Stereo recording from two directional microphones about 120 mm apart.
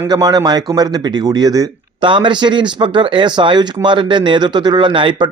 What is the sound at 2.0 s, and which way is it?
Speech, 40° right (ahead or behind).